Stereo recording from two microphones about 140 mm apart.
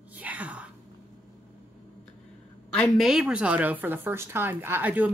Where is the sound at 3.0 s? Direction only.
5° right (ahead or behind).